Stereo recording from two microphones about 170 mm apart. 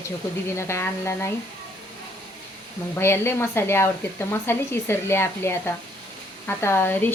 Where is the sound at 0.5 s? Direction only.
15° left (ahead or behind).